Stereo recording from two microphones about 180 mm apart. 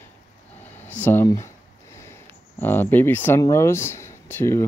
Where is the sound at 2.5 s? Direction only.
10° left (ahead or behind).